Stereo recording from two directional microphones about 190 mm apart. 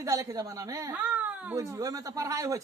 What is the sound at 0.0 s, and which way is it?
Speech, 15° right (ahead or behind).